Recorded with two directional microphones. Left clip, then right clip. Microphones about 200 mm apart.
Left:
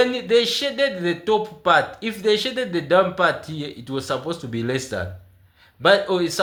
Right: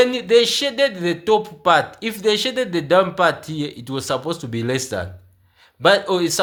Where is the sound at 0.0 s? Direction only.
35° right (ahead or behind).